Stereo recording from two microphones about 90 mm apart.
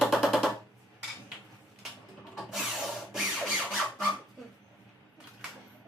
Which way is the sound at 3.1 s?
5° right (ahead or behind).